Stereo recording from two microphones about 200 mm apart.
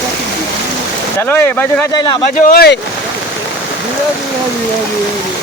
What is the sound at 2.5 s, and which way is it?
Speech, 50° left (ahead or behind).